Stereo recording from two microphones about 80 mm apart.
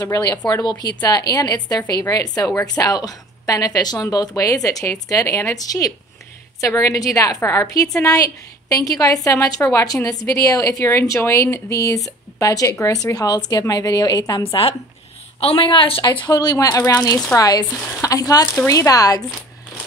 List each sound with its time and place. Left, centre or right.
0.0 s speech: left
4.6 s a woman's voice: left
5.6 s a woman's voice: left
15.5 s speech: left